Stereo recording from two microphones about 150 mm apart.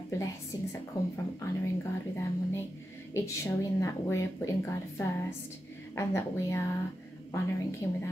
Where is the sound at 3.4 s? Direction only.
20° left (ahead or behind).